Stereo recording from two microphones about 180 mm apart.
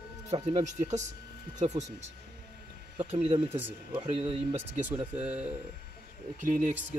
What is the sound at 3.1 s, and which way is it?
Speech, 35° right (ahead or behind).